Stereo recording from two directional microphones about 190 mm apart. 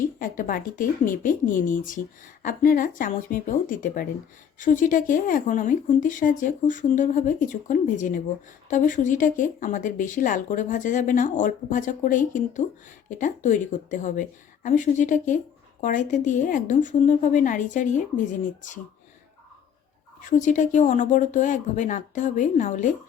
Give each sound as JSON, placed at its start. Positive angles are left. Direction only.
{"t": 0.2, "sound": "a woman's voice", "side_deg": 45}
{"t": 20.4, "sound": "a woman's voice", "side_deg": 40}